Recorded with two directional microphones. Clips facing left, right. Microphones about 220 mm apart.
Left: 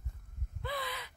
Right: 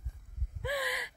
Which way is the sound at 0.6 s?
15° right (ahead or behind).